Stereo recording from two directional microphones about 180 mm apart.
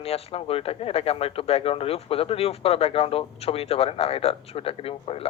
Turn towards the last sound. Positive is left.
turn(degrees=30)  # may be behind; listen again after turning